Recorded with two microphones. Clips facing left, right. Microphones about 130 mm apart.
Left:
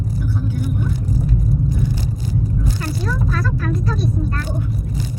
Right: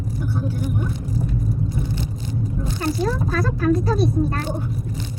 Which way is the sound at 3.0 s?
35° right (ahead or behind).